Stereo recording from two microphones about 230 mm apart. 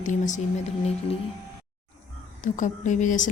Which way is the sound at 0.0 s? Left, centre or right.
Left.